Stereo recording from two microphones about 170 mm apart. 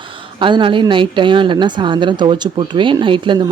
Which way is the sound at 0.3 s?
30° right (ahead or behind).